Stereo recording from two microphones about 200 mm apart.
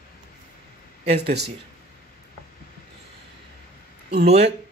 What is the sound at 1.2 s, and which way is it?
Speech, 55° right (ahead or behind).